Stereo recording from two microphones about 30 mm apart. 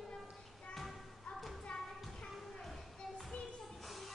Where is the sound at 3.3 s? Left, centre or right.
Left.